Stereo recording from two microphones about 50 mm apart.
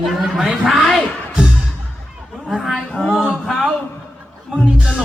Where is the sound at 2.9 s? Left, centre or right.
Centre.